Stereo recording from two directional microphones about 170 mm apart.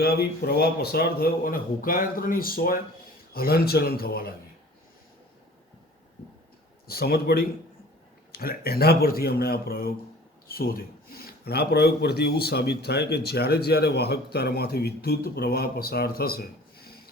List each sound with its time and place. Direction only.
0.0 s a man's voice: 65° left (ahead or behind)
6.8 s a man's voice: 65° left (ahead or behind)